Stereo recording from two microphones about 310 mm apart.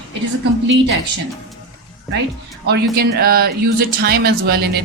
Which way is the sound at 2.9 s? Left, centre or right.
Right.